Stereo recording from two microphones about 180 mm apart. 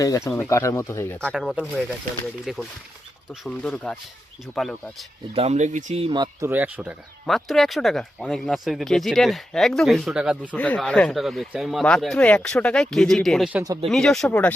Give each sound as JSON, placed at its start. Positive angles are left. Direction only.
{"t": 0.3, "sound": "speech", "side_deg": 15}
{"t": 5.3, "sound": "speech", "side_deg": -35}
{"t": 6.5, "sound": "speech", "side_deg": -10}
{"t": 7.3, "sound": "speech", "side_deg": 0}
{"t": 10.5, "sound": "speech", "side_deg": 10}